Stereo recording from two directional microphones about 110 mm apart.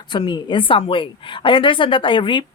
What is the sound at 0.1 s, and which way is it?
A woman's voice, 45° left (ahead or behind).